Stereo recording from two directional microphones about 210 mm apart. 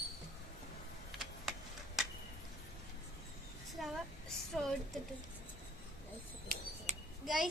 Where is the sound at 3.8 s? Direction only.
Centre (ahead or behind).